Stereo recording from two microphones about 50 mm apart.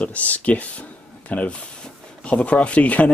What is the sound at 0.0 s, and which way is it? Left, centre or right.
Speech, left.